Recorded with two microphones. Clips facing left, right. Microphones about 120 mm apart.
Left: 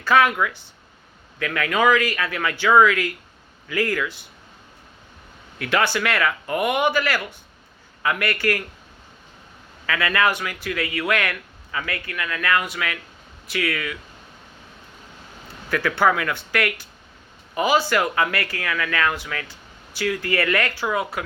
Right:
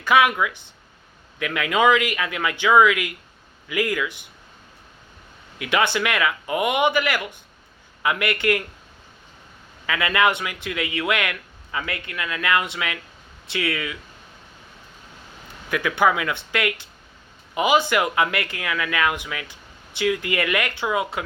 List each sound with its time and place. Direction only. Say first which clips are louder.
0.0 s speech: even; 15° right (ahead or behind)
5.5 s speech: even; 15° right (ahead or behind)
9.8 s speech: right 1 dB; 20° right (ahead or behind)
15.7 s speech: even; 15° right (ahead or behind)